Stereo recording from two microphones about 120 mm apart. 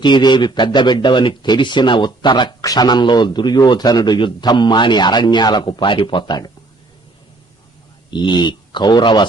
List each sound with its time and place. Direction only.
0.0 s a man's voice: 40° left (ahead or behind)
8.1 s a man's voice: 40° left (ahead or behind)